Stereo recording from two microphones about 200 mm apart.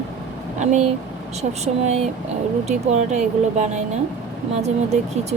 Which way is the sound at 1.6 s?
35° right (ahead or behind).